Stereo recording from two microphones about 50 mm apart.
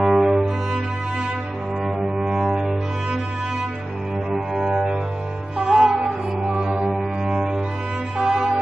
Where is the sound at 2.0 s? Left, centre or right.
Centre.